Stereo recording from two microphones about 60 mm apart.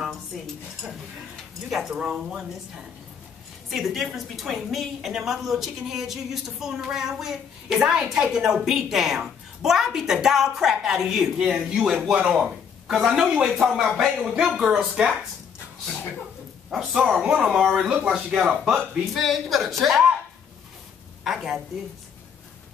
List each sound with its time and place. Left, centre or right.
1.7 s a woman's voice: centre
3.7 s a woman's voice: centre
14.1 s speech: right
14.4 s a woman's voice: centre
16.9 s a woman's voice: centre
21.2 s a sound: centre